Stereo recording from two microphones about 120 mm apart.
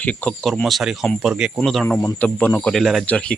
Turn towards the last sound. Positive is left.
turn(degrees=10)  # may be behind; listen again after turning